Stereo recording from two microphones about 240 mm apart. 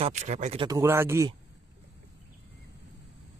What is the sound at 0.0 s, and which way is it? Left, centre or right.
Speech, right.